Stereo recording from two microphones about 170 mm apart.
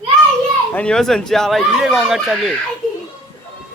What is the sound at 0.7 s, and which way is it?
Speech, 5° left (ahead or behind).